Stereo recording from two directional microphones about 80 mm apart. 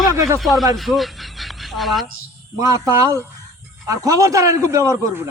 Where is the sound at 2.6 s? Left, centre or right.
Right.